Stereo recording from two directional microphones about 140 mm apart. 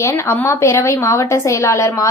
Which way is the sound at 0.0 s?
20° left (ahead or behind).